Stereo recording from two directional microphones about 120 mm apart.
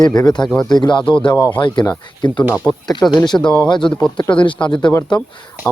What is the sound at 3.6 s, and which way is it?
Speech, 40° left (ahead or behind).